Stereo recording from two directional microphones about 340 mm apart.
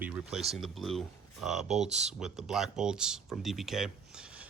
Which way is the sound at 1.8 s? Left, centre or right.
Centre.